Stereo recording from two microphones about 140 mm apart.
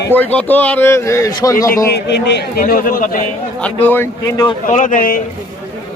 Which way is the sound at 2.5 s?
90° left.